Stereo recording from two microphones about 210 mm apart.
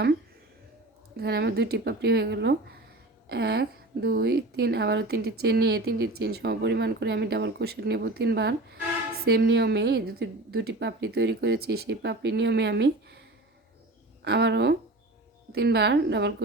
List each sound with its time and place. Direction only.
1.1 s a woman's voice: 50° right (ahead or behind)